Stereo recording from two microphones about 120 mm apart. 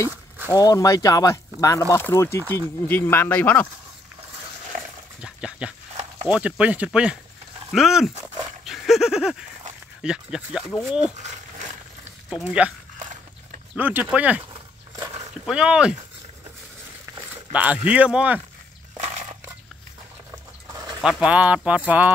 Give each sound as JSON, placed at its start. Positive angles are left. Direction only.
{"t": 0.5, "sound": "speech", "side_deg": 30}
{"t": 5.2, "sound": "dog", "side_deg": -10}
{"t": 6.2, "sound": "speech", "side_deg": -5}
{"t": 8.6, "sound": "dog", "side_deg": 0}
{"t": 10.0, "sound": "speech", "side_deg": -5}
{"t": 12.3, "sound": "speech", "side_deg": -10}
{"t": 13.7, "sound": "speech", "side_deg": -15}
{"t": 15.4, "sound": "speech", "side_deg": -5}
{"t": 17.5, "sound": "speech", "side_deg": -10}
{"t": 20.6, "sound": "bird", "side_deg": -35}
{"t": 21.0, "sound": "speech", "side_deg": -5}